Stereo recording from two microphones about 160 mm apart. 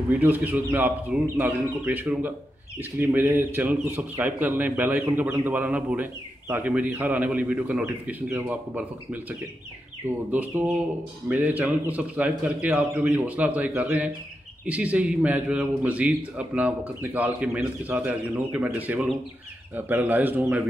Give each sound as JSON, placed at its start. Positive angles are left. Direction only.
{"t": 0.2, "sound": "a man's voice", "side_deg": -10}